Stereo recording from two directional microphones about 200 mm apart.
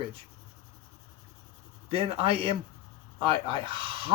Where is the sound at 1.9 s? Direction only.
30° right (ahead or behind).